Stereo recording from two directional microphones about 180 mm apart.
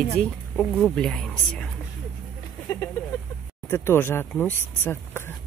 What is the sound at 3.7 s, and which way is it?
Speech, 15° left (ahead or behind).